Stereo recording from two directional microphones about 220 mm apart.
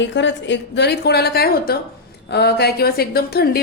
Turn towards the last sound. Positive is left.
turn(degrees=45)  # may be behind; listen again after turning